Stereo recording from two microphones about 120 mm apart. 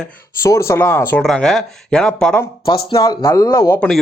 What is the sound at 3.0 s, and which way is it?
Speech, 35° left (ahead or behind).